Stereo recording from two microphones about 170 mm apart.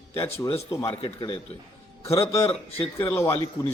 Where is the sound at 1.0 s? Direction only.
30° left (ahead or behind).